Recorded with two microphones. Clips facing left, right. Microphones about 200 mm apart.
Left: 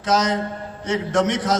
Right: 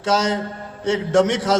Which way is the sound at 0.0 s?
30° right (ahead or behind).